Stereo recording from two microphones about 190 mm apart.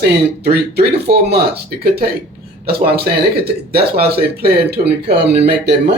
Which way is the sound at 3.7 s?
55° right (ahead or behind).